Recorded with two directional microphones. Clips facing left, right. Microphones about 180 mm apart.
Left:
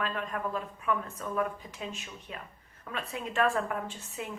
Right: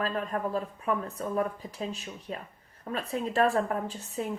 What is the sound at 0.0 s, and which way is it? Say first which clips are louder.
A woman's voice: right 3 dB; 35° right (ahead or behind).